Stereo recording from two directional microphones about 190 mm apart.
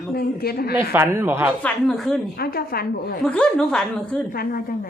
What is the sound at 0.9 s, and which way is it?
Speech, 10° right (ahead or behind).